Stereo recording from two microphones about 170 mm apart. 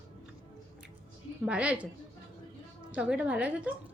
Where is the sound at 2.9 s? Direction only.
5° right (ahead or behind).